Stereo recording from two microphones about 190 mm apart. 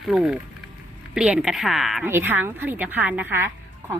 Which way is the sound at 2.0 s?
10° right (ahead or behind).